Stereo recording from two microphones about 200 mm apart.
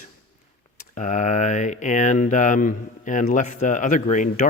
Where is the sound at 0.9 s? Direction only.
40° left (ahead or behind).